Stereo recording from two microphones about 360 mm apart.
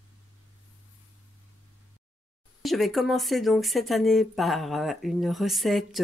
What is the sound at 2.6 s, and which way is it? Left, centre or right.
Speech, centre.